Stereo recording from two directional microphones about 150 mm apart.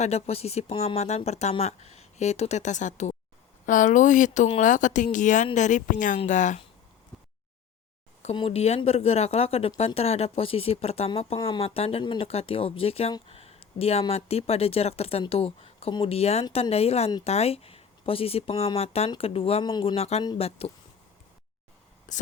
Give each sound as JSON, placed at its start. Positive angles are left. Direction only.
{"t": 0.0, "sound": "speech", "side_deg": 45}
{"t": 8.4, "sound": "speech", "side_deg": 40}
{"t": 13.3, "sound": "a sound", "side_deg": 40}
{"t": 14.1, "sound": "speech", "side_deg": 45}
{"t": 20.0, "sound": "speech", "side_deg": 45}
{"t": 22.1, "sound": "speech", "side_deg": 55}